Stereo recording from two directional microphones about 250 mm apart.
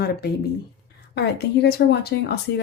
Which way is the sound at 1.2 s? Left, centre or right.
Left.